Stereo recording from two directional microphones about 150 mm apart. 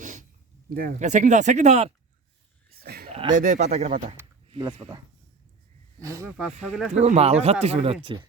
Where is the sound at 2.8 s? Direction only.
85° right.